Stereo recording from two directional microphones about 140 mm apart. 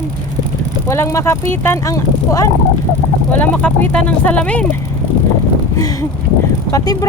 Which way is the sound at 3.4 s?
10° left (ahead or behind).